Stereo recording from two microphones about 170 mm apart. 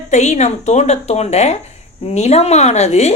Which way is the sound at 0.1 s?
40° left (ahead or behind).